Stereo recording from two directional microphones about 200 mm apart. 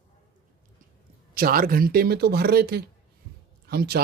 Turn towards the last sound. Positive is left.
turn(degrees=-50)  # may be behind; listen again after turning